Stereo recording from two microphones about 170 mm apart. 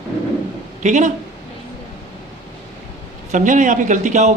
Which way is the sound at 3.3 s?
45° right (ahead or behind).